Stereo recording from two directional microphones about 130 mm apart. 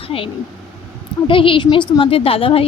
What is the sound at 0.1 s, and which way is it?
Speech, 45° left (ahead or behind).